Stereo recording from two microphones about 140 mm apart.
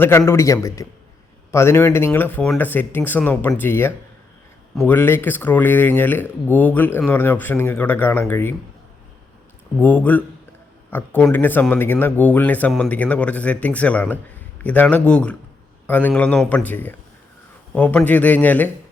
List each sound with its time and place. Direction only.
0.0 s a man's voice: 20° left (ahead or behind)
9.8 s speech: 15° left (ahead or behind)